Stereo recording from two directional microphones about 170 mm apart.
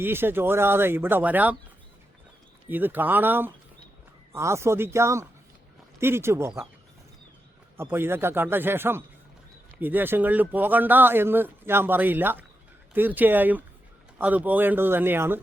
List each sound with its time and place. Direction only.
0.0 s speech: 15° right (ahead or behind)
2.6 s speech: 10° right (ahead or behind)
7.8 s speech: 15° right (ahead or behind)